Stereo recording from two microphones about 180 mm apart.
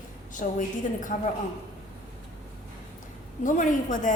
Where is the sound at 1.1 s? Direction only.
45° left (ahead or behind).